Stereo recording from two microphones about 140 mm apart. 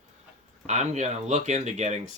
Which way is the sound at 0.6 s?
55° right (ahead or behind).